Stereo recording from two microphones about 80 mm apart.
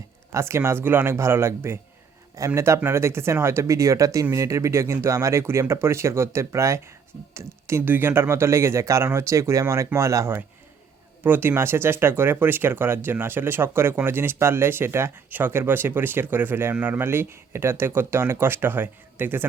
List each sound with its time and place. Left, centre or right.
0.3 s speech: right
11.2 s speech: right